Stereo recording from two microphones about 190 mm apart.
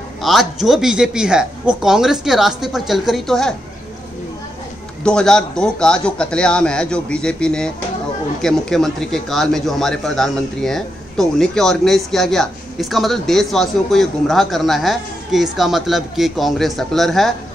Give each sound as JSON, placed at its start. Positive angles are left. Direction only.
{"t": 0.2, "sound": "speech", "side_deg": 0}
{"t": 5.0, "sound": "speech", "side_deg": 5}